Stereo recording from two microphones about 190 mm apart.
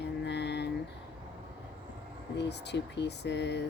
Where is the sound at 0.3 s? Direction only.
60° left (ahead or behind).